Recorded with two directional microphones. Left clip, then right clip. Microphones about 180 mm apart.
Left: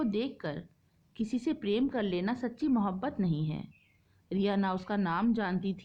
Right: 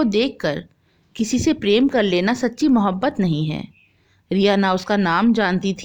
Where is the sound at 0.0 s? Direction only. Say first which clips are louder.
Right 15 dB; 45° right (ahead or behind).